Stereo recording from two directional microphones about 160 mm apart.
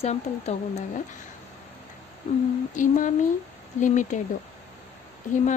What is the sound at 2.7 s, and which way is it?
Speech, 55° left (ahead or behind).